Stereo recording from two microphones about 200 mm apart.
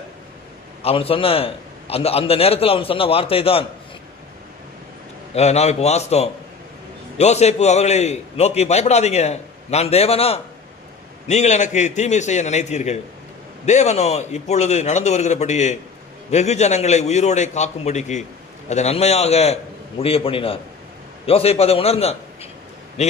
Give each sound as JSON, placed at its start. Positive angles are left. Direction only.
{"t": 0.8, "sound": "a man's voice", "side_deg": 25}
{"t": 5.3, "sound": "a man's voice", "side_deg": 35}